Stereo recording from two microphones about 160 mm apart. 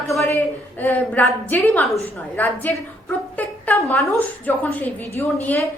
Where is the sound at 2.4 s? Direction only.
15° left (ahead or behind).